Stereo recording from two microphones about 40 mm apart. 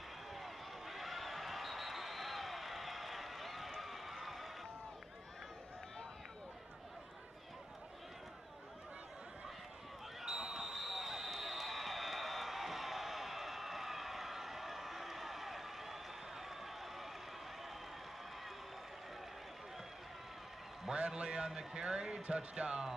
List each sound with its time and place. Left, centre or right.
0.3 s basketball bounce: centre
3.8 s run: centre
10.2 s basketball bounce: centre
10.6 s basketball bounce: centre
20.9 s a man's voice: right